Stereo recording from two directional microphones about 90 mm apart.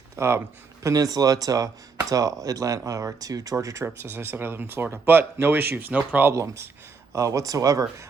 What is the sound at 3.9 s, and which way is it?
Speech, 25° right (ahead or behind).